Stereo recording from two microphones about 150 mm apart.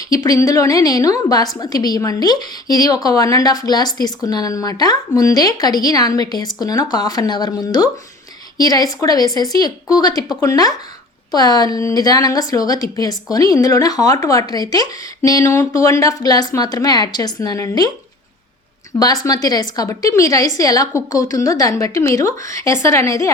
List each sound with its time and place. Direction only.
0.1 s a woman's voice: 25° left (ahead or behind)
18.9 s a woman's voice: 25° left (ahead or behind)